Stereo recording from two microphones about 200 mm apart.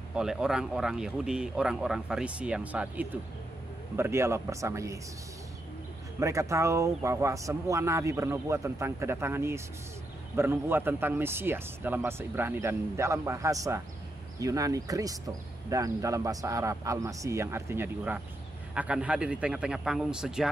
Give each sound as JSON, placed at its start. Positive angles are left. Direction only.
{"t": 0.1, "sound": "speech", "side_deg": -5}
{"t": 6.1, "sound": "speech", "side_deg": -15}